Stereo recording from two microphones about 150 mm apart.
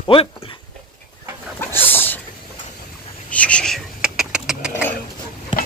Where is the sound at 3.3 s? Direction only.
10° left (ahead or behind); by 4.8 s 5° right (ahead or behind).